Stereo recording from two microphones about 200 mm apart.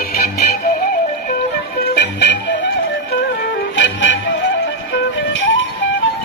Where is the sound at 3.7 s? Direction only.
70° left (ahead or behind).